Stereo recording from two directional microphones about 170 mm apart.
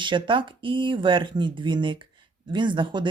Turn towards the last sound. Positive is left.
turn(degrees=-30)  # may be behind; listen again after turning